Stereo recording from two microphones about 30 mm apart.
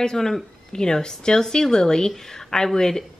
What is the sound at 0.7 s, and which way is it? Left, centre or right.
Speech, left.